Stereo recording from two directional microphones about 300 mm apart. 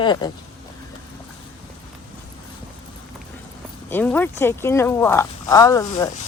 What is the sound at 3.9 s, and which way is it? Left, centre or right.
Speech, centre.